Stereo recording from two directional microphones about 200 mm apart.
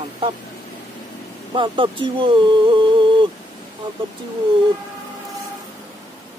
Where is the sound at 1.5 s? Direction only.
25° right (ahead or behind).